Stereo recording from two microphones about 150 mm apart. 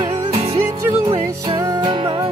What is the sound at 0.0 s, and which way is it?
Music, 25° right (ahead or behind).